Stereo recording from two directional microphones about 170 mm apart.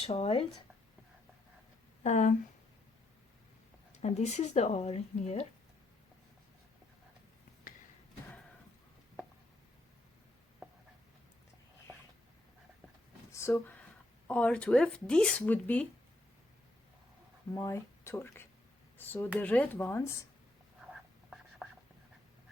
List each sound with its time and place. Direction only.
0.0 s speech: 35° left (ahead or behind)
2.0 s speech: 45° left (ahead or behind)
4.0 s speech: 40° left (ahead or behind)
13.3 s speech: 15° left (ahead or behind)
17.5 s speech: 15° left (ahead or behind)
20.9 s whispering: 5° right (ahead or behind)